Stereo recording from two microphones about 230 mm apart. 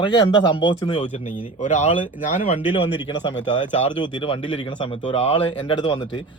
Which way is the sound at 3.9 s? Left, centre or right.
Centre.